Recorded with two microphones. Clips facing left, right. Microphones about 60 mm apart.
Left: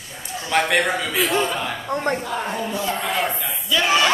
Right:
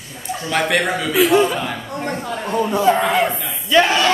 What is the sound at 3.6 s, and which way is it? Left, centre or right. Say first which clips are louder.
Crowd: right 7 dB; right.